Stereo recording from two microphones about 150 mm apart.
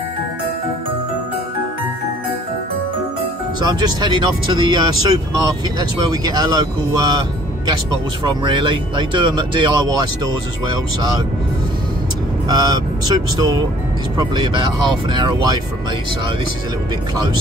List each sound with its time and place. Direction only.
3.6 s speech: 25° right (ahead or behind)
12.4 s speech: 25° right (ahead or behind)